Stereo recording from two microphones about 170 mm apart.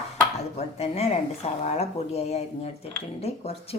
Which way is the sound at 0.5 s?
40° left (ahead or behind).